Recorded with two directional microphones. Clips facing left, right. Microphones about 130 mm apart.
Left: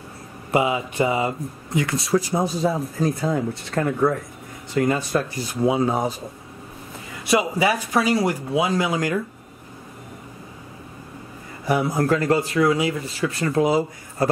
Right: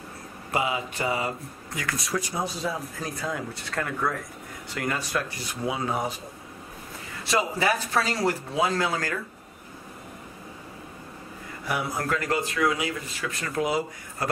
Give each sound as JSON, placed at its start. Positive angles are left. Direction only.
{"t": 0.5, "sound": "speech", "side_deg": 25}
{"t": 7.2, "sound": "speech", "side_deg": 15}
{"t": 11.6, "sound": "speech", "side_deg": 35}